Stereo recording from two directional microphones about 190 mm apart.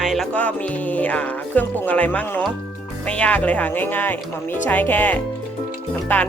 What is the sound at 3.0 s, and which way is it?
Speech, 5° left (ahead or behind).